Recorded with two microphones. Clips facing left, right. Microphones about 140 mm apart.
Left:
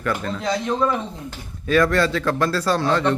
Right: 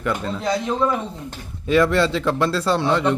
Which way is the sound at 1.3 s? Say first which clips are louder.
Right 1 dB; 25° right (ahead or behind).